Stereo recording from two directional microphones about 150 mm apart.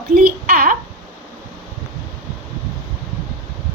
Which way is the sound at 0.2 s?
65° right (ahead or behind).